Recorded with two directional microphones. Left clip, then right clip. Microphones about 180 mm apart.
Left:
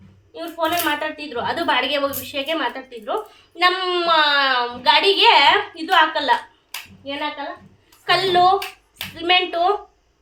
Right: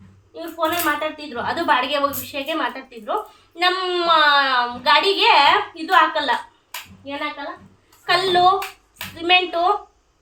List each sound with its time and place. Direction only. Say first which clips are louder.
0.3 s a woman's voice: left 1 dB; 10° right (ahead or behind)